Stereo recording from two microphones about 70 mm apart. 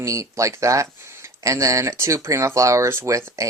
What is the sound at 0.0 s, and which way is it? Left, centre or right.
Speech, right.